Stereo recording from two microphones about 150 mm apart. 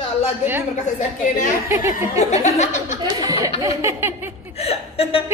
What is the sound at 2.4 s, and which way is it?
Speech, 50° left (ahead or behind).